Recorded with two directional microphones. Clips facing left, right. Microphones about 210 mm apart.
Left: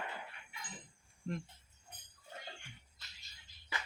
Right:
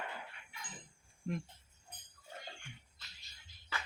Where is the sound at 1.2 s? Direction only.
10° right (ahead or behind).